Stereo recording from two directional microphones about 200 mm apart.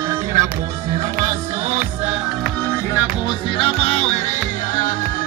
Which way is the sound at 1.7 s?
10° right (ahead or behind).